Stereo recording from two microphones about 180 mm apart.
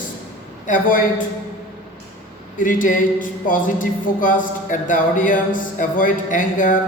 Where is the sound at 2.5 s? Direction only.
45° left (ahead or behind).